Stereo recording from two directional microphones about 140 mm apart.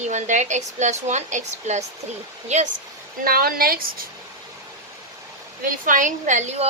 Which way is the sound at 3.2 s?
90° right.